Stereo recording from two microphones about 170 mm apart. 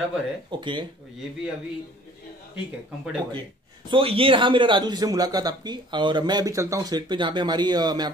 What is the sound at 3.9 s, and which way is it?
A man's voice, 30° right (ahead or behind).